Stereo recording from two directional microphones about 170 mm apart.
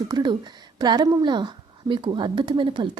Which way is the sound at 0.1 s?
25° right (ahead or behind).